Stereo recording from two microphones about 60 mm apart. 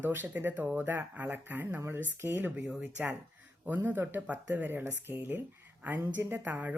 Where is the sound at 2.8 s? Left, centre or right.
Right.